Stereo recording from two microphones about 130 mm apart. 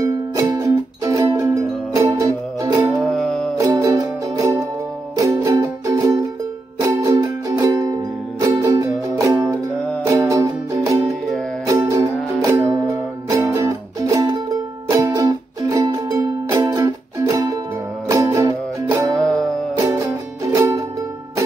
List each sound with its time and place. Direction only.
0.0 s music: 25° right (ahead or behind)
3.1 s music: 5° left (ahead or behind)
3.5 s music: 30° right (ahead or behind)
11.9 s music: 25° right (ahead or behind)